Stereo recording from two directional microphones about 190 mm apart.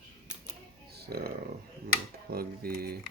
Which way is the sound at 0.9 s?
55° right (ahead or behind).